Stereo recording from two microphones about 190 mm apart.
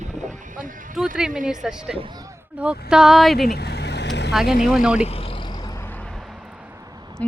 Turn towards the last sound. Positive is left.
turn(degrees=10)  # may be behind; listen again after turning